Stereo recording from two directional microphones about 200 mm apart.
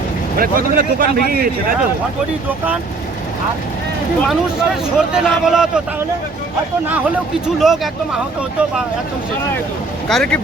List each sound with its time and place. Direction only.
0.3 s speech: 45° right (ahead or behind)
4.3 s speech: centre (ahead or behind)
7.4 s speech: centre (ahead or behind)
10.1 s speech: 5° left (ahead or behind)